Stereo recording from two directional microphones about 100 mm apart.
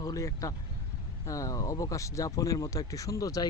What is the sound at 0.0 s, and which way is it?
Speech, 35° left (ahead or behind).